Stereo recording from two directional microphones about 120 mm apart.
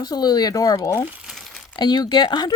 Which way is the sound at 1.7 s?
35° left (ahead or behind).